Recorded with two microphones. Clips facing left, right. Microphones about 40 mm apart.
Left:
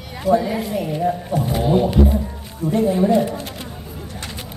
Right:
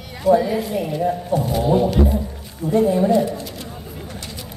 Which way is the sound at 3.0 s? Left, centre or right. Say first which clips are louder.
Even; left.